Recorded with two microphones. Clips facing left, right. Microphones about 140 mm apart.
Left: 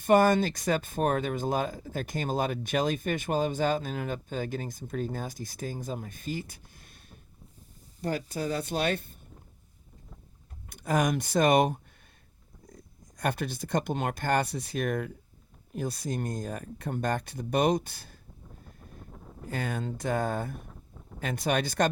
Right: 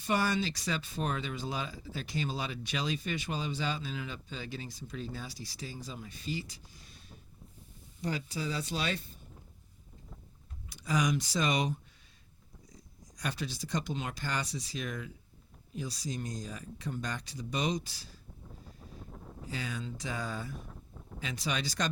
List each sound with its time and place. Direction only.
0.0 s speech: 50° left (ahead or behind)
10.7 s speech: 55° left (ahead or behind)
18.6 s wind noise: 50° left (ahead or behind)
19.1 s wind noise: centre (ahead or behind)
19.5 s speech: 55° left (ahead or behind)
20.7 s a sound: centre (ahead or behind)
21.2 s speech: 55° left (ahead or behind)